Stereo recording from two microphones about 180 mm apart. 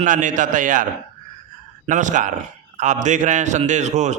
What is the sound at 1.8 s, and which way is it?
A man's voice, 45° right (ahead or behind).